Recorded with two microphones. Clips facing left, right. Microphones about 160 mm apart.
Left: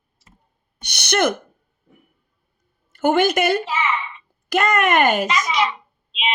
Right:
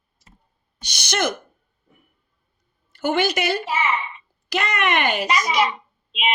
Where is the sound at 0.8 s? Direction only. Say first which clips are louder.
Left 4 dB; 60° left (ahead or behind).